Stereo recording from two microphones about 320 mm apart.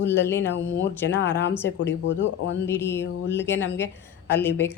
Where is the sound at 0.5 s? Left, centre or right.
Left.